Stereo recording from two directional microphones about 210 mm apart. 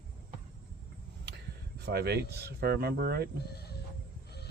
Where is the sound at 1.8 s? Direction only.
50° right (ahead or behind).